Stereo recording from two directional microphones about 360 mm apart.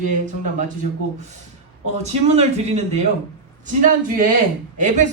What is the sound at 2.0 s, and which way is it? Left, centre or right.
Speech, centre.